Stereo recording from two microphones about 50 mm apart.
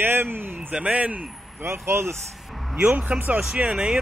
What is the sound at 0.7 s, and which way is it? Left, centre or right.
Speech, right.